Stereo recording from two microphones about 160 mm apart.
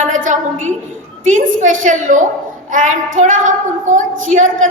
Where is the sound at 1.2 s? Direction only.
55° right (ahead or behind).